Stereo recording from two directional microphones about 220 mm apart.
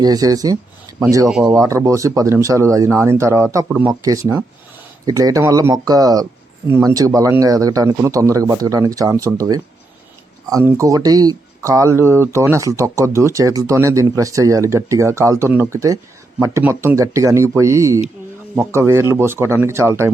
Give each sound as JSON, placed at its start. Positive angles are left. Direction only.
{"t": 0.0, "sound": "speech", "side_deg": -15}